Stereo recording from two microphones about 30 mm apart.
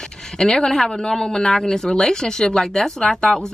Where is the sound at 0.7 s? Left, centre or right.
Centre.